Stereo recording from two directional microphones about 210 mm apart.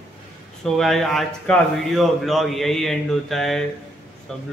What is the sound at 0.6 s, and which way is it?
A man's voice, centre (ahead or behind).